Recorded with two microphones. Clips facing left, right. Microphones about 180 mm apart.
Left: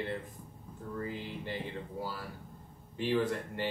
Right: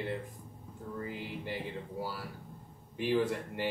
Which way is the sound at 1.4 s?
10° right (ahead or behind).